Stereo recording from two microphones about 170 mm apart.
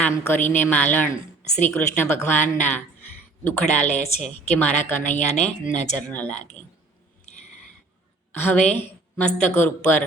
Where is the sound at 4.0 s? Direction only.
45° left (ahead or behind).